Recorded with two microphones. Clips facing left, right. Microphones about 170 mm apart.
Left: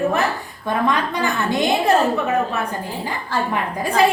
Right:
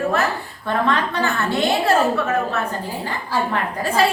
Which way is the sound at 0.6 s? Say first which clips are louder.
Even; 15° left (ahead or behind).